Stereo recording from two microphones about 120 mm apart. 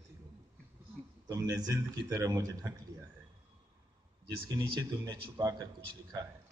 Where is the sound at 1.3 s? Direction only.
30° right (ahead or behind).